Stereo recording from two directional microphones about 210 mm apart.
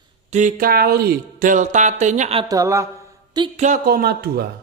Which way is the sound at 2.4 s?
15° right (ahead or behind).